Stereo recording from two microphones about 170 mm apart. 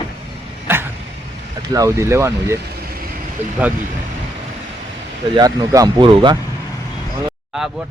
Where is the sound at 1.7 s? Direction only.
20° right (ahead or behind).